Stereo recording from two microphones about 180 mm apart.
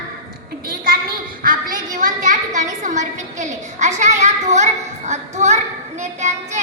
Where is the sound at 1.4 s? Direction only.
50° right (ahead or behind).